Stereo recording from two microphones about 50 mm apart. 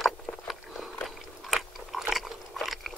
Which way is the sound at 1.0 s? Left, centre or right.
Centre.